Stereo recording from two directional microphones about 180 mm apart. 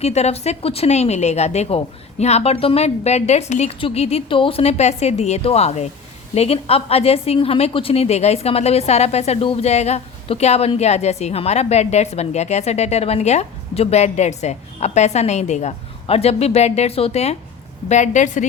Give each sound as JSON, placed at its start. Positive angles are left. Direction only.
{"t": 0.0, "sound": "a woman's voice", "side_deg": 35}